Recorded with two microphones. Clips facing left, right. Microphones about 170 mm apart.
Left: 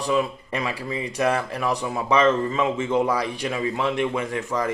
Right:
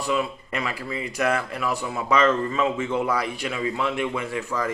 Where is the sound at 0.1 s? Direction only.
30° left (ahead or behind).